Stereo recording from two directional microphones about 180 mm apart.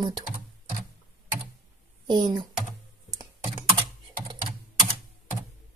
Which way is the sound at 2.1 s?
25° right (ahead or behind).